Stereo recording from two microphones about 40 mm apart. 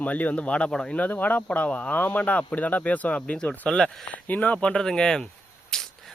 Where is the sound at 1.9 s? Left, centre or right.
Left.